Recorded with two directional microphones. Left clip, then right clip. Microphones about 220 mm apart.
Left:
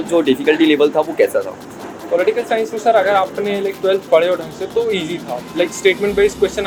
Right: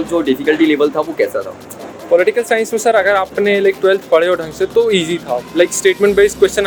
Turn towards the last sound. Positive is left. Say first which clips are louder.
# right 4 dB
turn(degrees=-50)  # may be behind; listen again after turning